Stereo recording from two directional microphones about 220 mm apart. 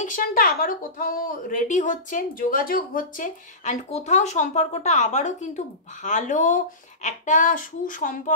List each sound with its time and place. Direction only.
0.0 s a woman's voice: 40° left (ahead or behind)